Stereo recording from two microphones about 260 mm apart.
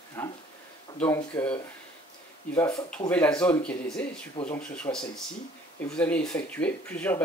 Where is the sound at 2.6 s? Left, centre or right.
Centre.